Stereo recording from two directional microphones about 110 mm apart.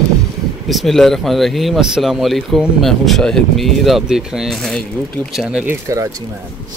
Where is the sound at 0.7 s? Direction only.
Centre (ahead or behind).